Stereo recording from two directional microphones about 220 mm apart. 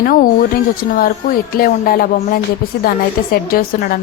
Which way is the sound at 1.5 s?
40° left (ahead or behind).